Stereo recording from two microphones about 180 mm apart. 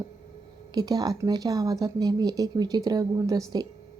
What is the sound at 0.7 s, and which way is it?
Speech, 20° right (ahead or behind).